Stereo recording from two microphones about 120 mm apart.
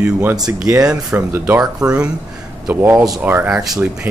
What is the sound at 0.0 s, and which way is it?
Speech, 15° right (ahead or behind).